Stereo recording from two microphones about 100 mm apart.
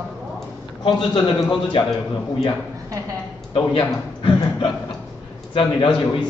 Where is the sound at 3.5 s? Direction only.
60° left (ahead or behind).